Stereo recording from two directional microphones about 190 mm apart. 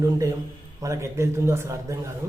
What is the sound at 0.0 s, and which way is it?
Speech, 15° right (ahead or behind).